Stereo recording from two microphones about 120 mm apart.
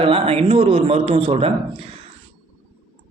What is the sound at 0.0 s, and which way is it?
A woman's voice, 50° right (ahead or behind).